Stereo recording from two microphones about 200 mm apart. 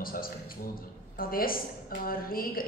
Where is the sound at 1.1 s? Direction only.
45° left (ahead or behind).